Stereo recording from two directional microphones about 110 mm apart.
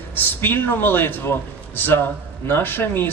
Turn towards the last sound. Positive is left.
turn(degrees=20)  # may be behind; listen again after turning